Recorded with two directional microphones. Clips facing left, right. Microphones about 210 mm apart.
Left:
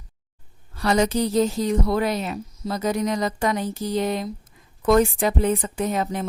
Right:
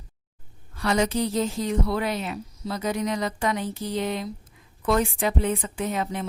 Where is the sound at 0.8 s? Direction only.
40° left (ahead or behind).